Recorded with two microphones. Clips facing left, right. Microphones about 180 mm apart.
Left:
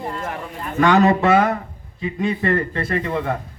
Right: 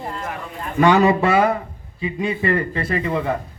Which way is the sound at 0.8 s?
10° right (ahead or behind).